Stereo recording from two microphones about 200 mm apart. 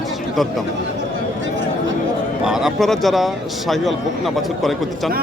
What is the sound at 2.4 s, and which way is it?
Speech, centre (ahead or behind).